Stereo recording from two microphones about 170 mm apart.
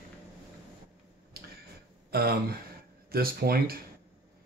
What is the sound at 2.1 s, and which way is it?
Speech, 65° right (ahead or behind).